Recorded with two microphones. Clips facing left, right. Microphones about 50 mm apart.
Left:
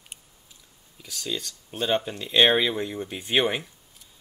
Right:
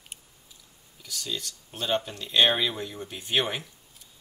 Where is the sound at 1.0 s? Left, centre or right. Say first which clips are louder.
Left 2 dB; left.